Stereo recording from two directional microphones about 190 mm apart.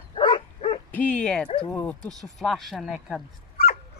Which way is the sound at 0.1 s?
25° left (ahead or behind).